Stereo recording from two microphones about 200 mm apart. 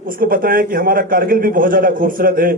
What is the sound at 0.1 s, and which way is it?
Speech, 45° right (ahead or behind).